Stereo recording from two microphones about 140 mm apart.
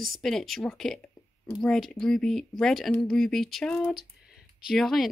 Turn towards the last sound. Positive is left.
turn(degrees=0)  # may be behind; listen again after turning